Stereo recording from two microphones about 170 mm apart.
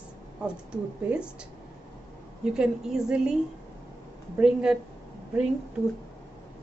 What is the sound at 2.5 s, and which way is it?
A woman's voice, 5° right (ahead or behind).